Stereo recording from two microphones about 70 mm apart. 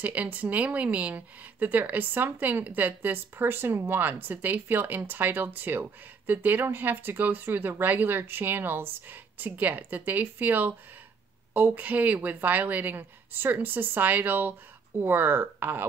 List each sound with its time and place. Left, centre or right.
0.0 s speech: right